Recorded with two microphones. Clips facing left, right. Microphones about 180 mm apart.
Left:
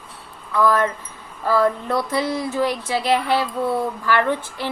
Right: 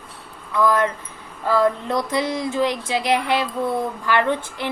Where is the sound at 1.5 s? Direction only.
20° right (ahead or behind).